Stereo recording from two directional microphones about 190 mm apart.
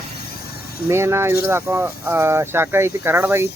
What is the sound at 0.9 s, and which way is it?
Speech, 15° right (ahead or behind).